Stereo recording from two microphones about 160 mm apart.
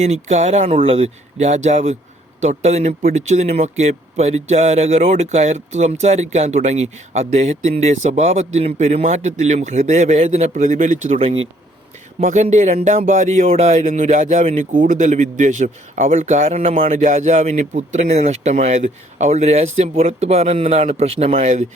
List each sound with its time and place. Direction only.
0.0 s speech: 45° right (ahead or behind)
11.2 s speech: 35° right (ahead or behind)
12.2 s speech: 50° right (ahead or behind)